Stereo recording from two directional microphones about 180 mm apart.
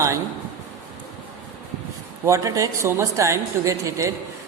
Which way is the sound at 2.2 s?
20° right (ahead or behind).